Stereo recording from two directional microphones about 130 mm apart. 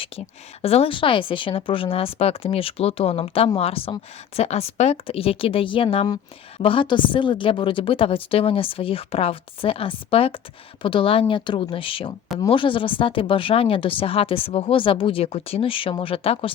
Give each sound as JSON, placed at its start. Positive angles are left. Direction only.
{"t": 0.6, "sound": "speech", "side_deg": 50}